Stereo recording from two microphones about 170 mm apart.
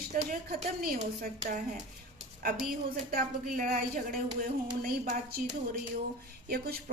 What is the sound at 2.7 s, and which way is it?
Speech, 60° right (ahead or behind).